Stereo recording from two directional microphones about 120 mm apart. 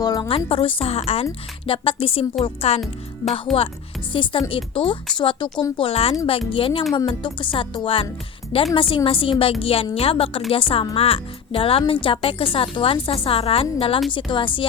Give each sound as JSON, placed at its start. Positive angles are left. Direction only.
{"t": 0.0, "sound": "speech", "side_deg": 35}
{"t": 0.3, "sound": "speech", "side_deg": 50}
{"t": 3.5, "sound": "speech", "side_deg": 0}
{"t": 4.1, "sound": "speech", "side_deg": 45}
{"t": 5.7, "sound": "speech", "side_deg": 55}